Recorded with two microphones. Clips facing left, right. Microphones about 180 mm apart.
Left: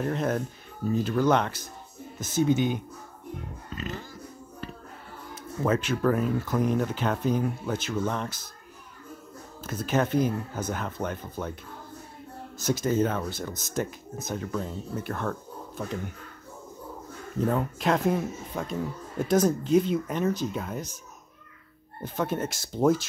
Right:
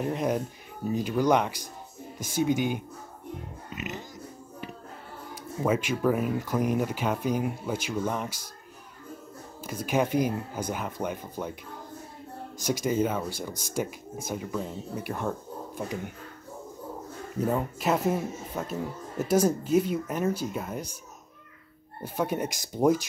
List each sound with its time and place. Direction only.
0.0 s speech: 10° right (ahead or behind)
5.3 s speech: 10° right (ahead or behind)
9.6 s speech: 10° right (ahead or behind)
12.5 s speech: 10° right (ahead or behind)
17.4 s speech: 5° right (ahead or behind)
22.0 s speech: 10° right (ahead or behind)